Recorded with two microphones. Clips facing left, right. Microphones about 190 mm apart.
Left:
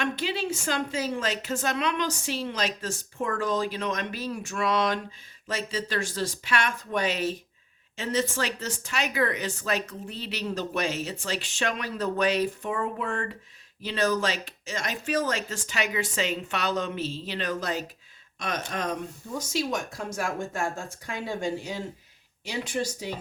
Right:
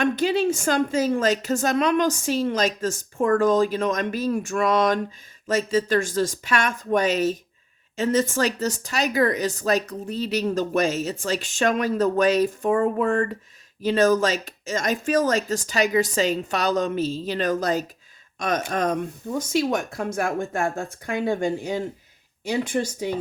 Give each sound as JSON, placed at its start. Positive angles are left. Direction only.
{"t": 0.0, "sound": "speech", "side_deg": -45}